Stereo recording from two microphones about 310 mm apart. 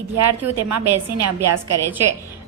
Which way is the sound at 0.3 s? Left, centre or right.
Right.